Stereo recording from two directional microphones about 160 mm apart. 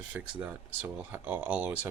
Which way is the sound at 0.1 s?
10° right (ahead or behind).